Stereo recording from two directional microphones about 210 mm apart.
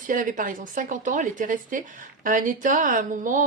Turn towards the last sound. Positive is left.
turn(degrees=-35)  # may be behind; listen again after turning